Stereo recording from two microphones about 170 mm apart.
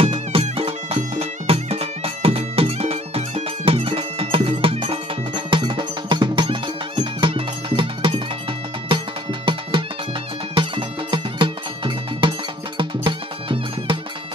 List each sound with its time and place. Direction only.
0.0 s music: 35° right (ahead or behind)
9.5 s music: 30° right (ahead or behind)